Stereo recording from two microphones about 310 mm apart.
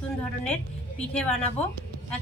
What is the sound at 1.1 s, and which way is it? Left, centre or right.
Speech, centre.